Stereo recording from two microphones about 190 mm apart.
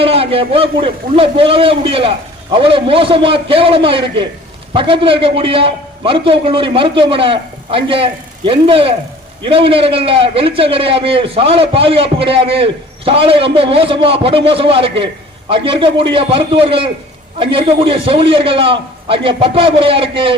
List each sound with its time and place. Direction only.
0.0 s a man's voice: 30° right (ahead or behind)